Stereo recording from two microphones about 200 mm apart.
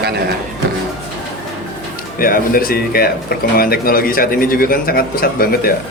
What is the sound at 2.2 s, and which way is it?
A man's voice, 45° left (ahead or behind).